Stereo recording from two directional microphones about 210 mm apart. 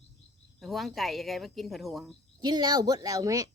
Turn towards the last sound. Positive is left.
turn(degrees=-15)  # may be behind; listen again after turning